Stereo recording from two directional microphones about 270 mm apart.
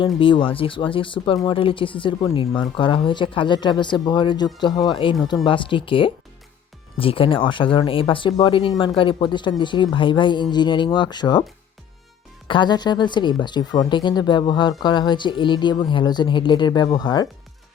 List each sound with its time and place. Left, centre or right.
0.0 s speech: centre
12.5 s speech: centre